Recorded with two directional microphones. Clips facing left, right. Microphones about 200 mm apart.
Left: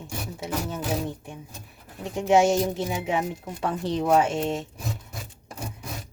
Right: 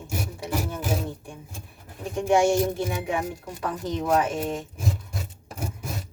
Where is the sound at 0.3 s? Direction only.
20° left (ahead or behind).